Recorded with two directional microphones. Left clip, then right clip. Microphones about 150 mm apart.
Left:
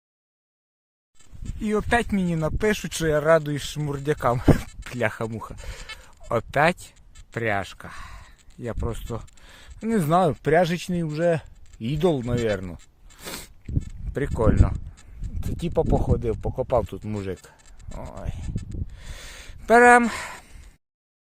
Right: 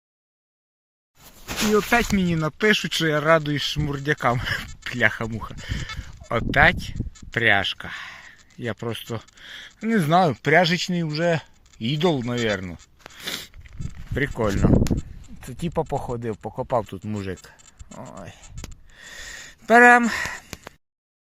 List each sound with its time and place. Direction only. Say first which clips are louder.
1.7 s speech: right 2 dB; 20° left (ahead or behind); by 6.7 s 40° left (ahead or behind)
7.2 s speech: right 7 dB; 15° left (ahead or behind)
9.4 s speech: right 3 dB; 30° left (ahead or behind)
13.7 s speech: right 2 dB; 20° left (ahead or behind)
15.4 s speech: left 2 dB; 35° left (ahead or behind); by 20.5 s 20° left (ahead or behind)